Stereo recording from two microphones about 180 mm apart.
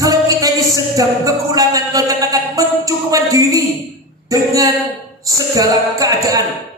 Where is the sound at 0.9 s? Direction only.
20° right (ahead or behind).